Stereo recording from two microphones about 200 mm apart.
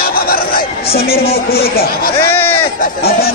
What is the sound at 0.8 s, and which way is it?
Speech, 30° left (ahead or behind).